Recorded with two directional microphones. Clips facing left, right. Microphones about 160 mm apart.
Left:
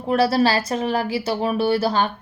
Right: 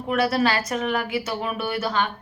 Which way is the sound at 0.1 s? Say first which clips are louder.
Left 4 dB; 30° left (ahead or behind).